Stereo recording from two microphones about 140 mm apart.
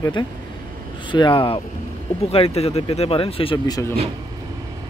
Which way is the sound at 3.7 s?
20° left (ahead or behind).